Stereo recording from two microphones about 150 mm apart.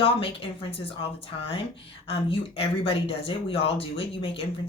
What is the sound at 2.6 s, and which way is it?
Speech, 40° left (ahead or behind).